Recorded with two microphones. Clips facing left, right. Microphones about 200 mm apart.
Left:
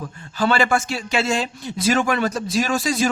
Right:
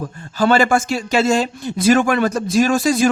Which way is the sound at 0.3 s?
45° right (ahead or behind).